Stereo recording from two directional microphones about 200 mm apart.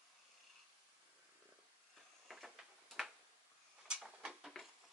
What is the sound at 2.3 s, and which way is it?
Tick-tock, centre (ahead or behind).